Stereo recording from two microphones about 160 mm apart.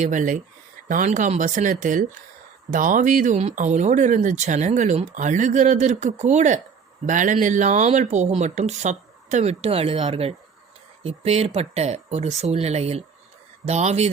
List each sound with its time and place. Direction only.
0.0 s speech: 55° right (ahead or behind)